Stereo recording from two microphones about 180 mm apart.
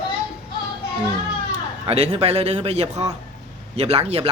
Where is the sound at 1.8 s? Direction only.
35° right (ahead or behind).